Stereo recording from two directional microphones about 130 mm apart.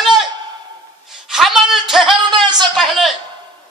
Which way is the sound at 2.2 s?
35° right (ahead or behind).